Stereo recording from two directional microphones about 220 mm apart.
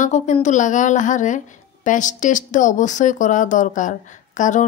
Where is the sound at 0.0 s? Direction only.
35° left (ahead or behind).